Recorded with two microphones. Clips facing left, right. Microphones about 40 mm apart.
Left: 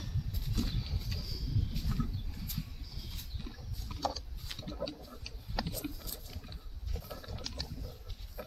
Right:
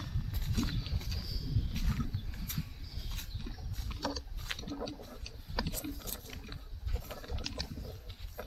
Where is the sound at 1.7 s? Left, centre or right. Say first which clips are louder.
Even; right.